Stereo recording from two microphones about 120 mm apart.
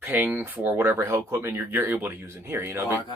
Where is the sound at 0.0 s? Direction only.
15° right (ahead or behind).